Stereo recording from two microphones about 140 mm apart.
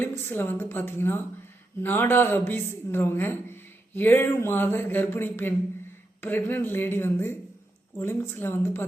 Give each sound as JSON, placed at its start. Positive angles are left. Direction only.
{"t": 0.0, "sound": "a woman's voice", "side_deg": 15}